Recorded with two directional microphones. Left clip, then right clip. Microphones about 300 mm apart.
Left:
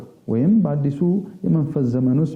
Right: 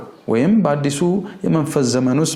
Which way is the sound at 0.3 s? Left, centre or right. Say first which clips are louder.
Right 5 dB; centre.